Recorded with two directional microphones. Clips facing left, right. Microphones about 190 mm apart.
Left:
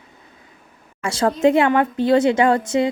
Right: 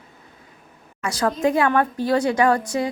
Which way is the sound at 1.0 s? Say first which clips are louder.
Left 4 dB; 25° left (ahead or behind).